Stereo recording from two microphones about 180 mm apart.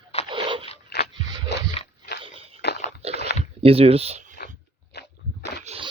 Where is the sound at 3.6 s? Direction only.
30° right (ahead or behind).